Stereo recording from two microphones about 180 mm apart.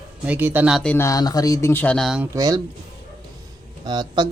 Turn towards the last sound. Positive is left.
turn(degrees=-25)  # may be behind; listen again after turning